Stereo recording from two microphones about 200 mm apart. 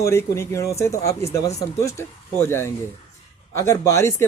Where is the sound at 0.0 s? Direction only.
15° left (ahead or behind).